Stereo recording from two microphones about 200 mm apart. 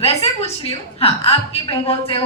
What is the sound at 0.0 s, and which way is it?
A woman's voice, 30° left (ahead or behind).